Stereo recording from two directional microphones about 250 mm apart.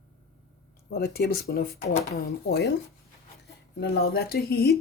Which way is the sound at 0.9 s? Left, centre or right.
Left.